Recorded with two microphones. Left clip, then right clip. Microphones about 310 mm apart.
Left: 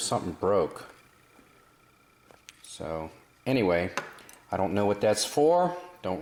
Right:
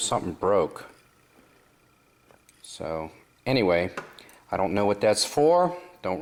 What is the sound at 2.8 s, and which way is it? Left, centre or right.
Speech, centre.